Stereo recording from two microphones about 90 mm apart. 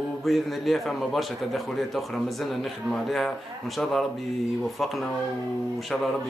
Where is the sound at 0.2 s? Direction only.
Centre (ahead or behind).